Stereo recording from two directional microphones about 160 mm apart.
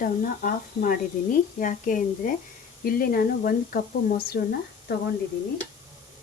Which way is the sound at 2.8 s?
65° left (ahead or behind).